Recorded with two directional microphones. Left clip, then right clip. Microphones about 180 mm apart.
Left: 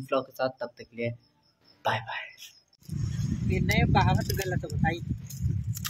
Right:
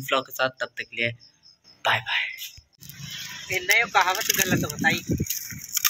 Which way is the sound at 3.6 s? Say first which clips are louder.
Right 7 dB; 15° left (ahead or behind).